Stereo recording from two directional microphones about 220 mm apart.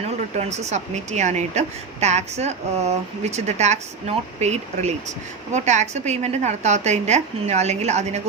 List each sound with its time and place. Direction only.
0.3 s a woman's voice: 30° right (ahead or behind)